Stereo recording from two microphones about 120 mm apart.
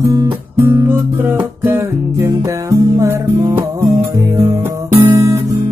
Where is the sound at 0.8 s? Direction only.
20° right (ahead or behind).